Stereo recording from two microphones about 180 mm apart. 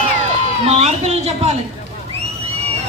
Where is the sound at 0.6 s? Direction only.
35° right (ahead or behind).